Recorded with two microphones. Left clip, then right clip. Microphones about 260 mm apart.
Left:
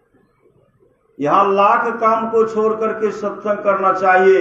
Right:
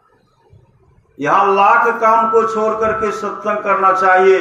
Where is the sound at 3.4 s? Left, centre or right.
Right.